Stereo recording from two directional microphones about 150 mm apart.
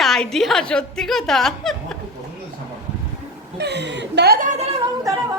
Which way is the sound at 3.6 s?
90° right.